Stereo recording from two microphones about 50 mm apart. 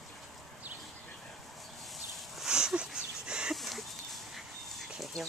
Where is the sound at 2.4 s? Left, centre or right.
Centre.